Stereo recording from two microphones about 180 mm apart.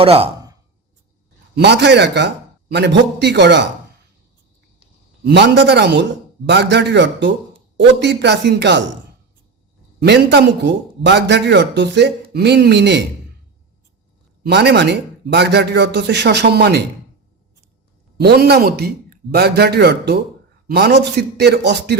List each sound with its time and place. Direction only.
0.0 s speech: 35° right (ahead or behind)
1.5 s a man's voice: 70° right (ahead or behind)
5.2 s a man's voice: 70° right (ahead or behind)
10.1 s a man's voice: 70° right (ahead or behind)
14.4 s a man's voice: 65° right (ahead or behind)
18.2 s a man's voice: 65° right (ahead or behind)